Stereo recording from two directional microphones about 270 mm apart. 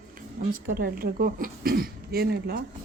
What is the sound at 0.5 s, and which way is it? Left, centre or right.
A woman's voice, right.